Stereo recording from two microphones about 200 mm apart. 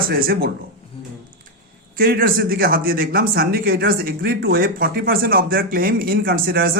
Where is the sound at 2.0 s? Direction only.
50° right (ahead or behind).